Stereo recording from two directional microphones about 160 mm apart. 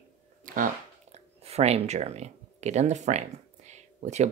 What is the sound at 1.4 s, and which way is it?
Speech, 40° right (ahead or behind).